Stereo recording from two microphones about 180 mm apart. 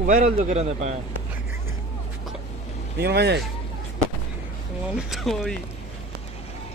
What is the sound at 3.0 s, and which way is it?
Speech, 65° right (ahead or behind).